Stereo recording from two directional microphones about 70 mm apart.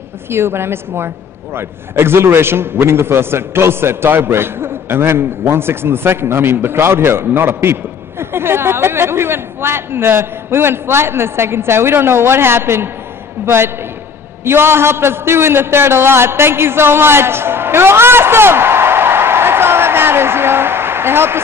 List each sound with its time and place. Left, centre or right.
0.3 s a woman's voice: right
14.4 s a man's voice: right